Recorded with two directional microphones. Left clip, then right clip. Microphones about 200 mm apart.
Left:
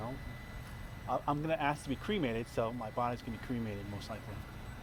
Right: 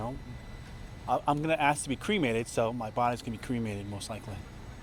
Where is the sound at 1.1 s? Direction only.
55° right (ahead or behind).